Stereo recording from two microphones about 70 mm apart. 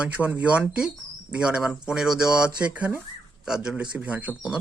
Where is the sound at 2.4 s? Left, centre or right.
Centre.